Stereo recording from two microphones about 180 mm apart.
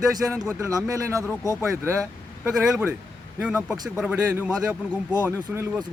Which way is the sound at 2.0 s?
Centre (ahead or behind).